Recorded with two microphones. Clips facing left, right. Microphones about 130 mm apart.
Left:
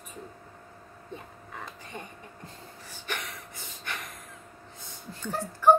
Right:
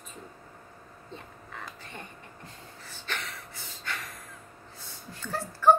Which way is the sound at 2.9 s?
15° left (ahead or behind).